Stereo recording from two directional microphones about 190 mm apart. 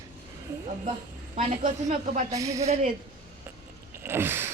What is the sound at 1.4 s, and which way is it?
Speech, 35° right (ahead or behind).